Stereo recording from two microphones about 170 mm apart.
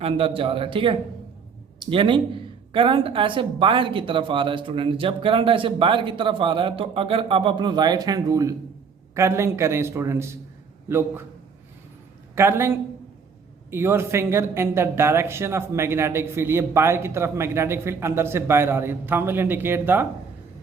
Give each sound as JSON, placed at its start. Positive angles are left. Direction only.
{"t": 0.0, "sound": "speech", "side_deg": -35}
{"t": 12.3, "sound": "speech", "side_deg": -15}